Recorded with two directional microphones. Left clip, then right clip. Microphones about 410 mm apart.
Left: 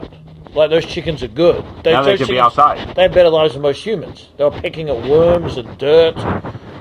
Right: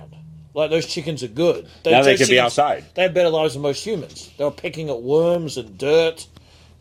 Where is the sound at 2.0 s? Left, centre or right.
Centre.